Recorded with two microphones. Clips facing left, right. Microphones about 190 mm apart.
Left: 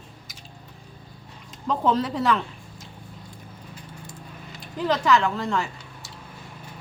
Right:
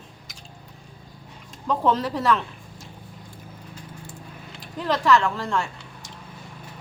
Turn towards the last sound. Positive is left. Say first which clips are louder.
# even
turn(degrees=0)  # may be behind; listen again after turning